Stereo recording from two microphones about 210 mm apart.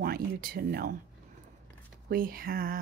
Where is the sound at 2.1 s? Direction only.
45° right (ahead or behind).